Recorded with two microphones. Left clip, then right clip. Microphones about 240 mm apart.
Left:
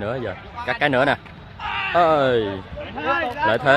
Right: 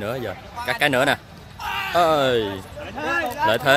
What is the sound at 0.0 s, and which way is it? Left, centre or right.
Speech, centre.